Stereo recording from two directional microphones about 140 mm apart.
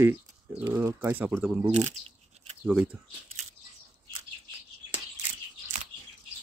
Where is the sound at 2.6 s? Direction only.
10° right (ahead or behind).